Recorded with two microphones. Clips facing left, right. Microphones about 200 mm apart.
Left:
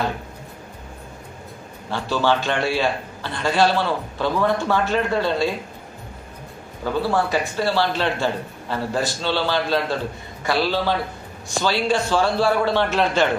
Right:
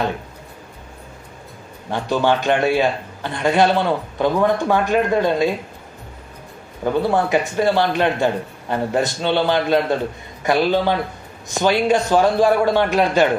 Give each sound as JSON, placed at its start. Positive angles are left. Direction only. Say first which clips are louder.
{"t": 1.9, "sound": "a man's voice", "louder": "right 3 dB", "side_deg": -20}
{"t": 6.8, "sound": "a man's voice", "louder": "right 3 dB", "side_deg": -20}